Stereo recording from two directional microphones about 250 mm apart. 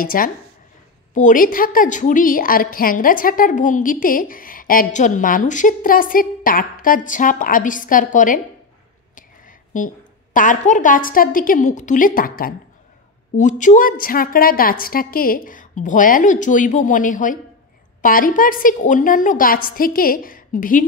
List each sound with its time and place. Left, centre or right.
0.0 s a woman's voice: left
9.7 s a woman's voice: left